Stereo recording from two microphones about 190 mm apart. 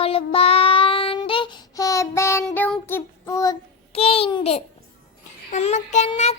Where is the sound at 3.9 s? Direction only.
30° left (ahead or behind).